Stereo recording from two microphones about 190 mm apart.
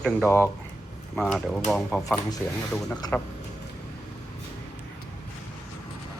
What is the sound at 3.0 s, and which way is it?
Speech, 20° left (ahead or behind).